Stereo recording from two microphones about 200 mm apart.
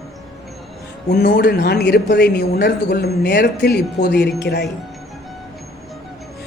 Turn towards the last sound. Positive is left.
turn(degrees=55)  # may be behind; listen again after turning